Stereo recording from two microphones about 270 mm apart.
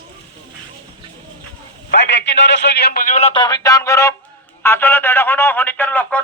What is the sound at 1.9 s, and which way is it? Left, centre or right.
A man's voice, left.